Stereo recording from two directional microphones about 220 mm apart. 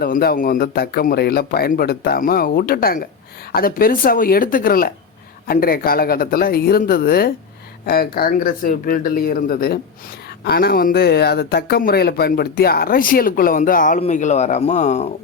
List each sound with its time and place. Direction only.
0.0 s speech: 45° left (ahead or behind)